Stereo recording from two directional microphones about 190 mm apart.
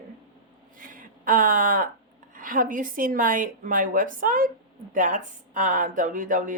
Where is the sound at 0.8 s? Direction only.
45° right (ahead or behind).